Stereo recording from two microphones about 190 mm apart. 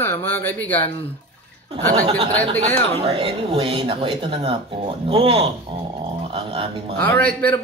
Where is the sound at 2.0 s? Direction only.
30° right (ahead or behind).